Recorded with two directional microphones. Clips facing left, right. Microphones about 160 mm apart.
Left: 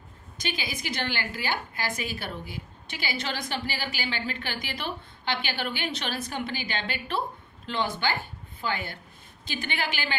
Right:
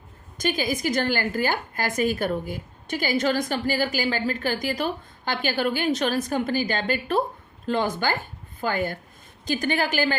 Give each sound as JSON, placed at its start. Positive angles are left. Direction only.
{"t": 0.3, "sound": "a woman's voice", "side_deg": -45}